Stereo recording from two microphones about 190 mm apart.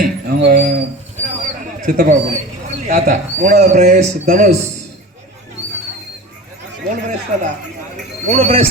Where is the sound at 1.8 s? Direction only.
40° right (ahead or behind).